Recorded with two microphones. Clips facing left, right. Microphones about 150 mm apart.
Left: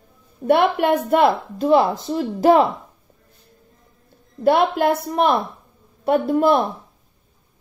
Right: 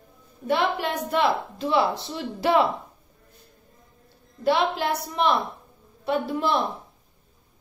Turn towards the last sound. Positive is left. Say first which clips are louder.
# left 7 dB
turn(degrees=50)  # may be behind; listen again after turning